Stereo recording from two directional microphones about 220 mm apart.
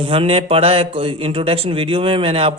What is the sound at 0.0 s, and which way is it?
A man's voice, 25° right (ahead or behind).